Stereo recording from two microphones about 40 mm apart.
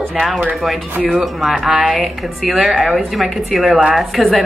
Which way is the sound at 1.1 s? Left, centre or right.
Centre.